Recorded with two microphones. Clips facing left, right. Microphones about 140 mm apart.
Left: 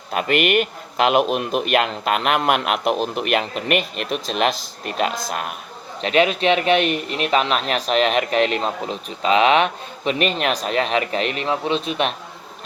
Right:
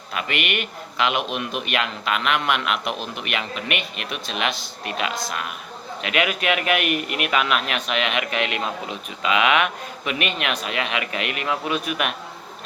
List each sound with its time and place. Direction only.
0.1 s speech: 45° left (ahead or behind)
6.0 s speech: 30° left (ahead or behind)